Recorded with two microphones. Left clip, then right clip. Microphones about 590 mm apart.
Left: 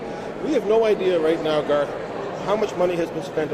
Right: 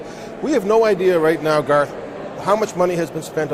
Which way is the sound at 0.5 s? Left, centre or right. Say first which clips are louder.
Right 3 dB; right.